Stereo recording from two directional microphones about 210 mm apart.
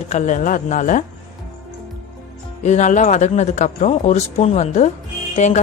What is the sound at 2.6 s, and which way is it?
Speech, 35° left (ahead or behind).